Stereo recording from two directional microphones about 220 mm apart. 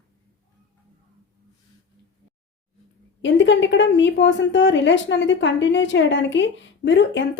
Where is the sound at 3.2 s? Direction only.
55° left (ahead or behind).